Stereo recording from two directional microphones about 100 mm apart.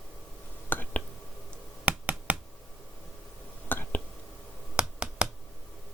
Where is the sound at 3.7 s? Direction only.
20° left (ahead or behind).